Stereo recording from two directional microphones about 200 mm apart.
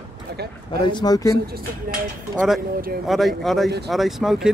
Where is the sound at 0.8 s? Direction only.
20° left (ahead or behind).